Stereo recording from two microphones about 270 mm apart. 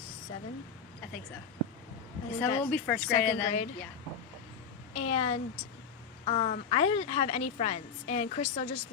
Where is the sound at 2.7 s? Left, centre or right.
Centre.